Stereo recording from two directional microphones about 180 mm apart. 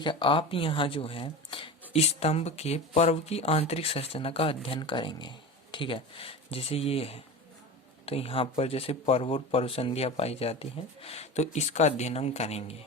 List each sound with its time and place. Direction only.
0.0 s speech: 25° left (ahead or behind)